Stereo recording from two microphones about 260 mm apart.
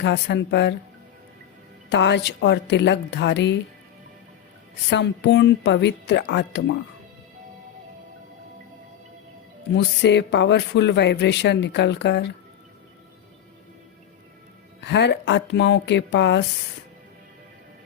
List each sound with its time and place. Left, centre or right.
0.0 s speech: left
1.9 s a woman's voice: left
4.9 s speech: left
9.7 s speech: left
14.8 s speech: left